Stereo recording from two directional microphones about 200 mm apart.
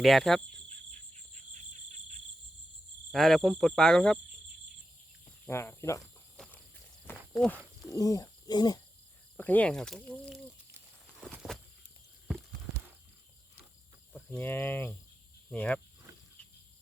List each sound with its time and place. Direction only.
0.0 s speech: centre (ahead or behind)
3.1 s speech: centre (ahead or behind)
5.5 s speech: 15° left (ahead or behind)
6.3 s a sound: 5° left (ahead or behind)
7.0 s walk: 10° left (ahead or behind)
7.9 s speech: 15° left (ahead or behind)
9.4 s speech: 10° left (ahead or behind)
10.7 s a sound: 10° right (ahead or behind)
14.1 s speech: 10° left (ahead or behind)